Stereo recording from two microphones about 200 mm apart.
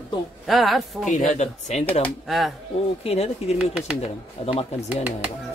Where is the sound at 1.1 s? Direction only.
35° left (ahead or behind).